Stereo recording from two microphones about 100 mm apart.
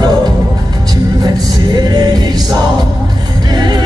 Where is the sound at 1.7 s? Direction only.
40° right (ahead or behind).